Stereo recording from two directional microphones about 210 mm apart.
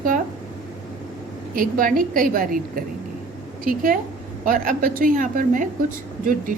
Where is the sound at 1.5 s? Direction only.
40° right (ahead or behind).